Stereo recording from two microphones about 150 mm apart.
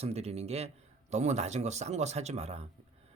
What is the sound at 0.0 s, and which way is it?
Speech, 45° right (ahead or behind).